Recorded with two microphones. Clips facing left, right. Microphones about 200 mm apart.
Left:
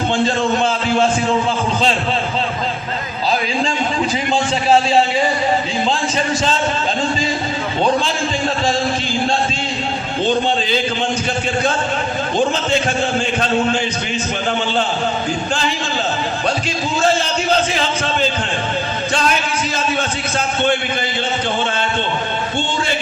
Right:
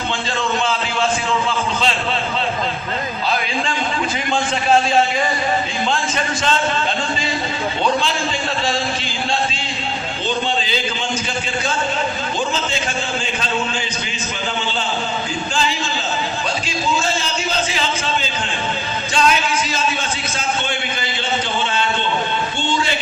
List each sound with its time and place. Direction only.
0.6 s a man's voice: 45° left (ahead or behind)
19.1 s speech: 55° left (ahead or behind)